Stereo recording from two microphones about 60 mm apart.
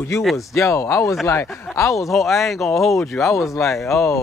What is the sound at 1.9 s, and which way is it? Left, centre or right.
Speech, centre.